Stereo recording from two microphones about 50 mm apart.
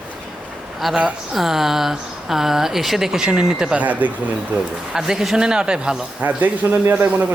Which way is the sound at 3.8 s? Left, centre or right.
Right.